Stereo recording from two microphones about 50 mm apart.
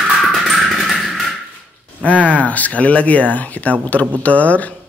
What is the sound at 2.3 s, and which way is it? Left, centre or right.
Speech, left.